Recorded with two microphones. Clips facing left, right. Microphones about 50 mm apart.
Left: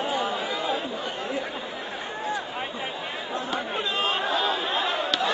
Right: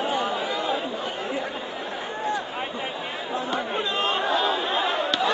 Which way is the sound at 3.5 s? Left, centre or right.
Centre.